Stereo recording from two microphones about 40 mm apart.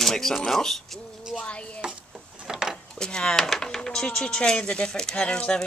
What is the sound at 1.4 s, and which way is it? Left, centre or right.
Speech, left.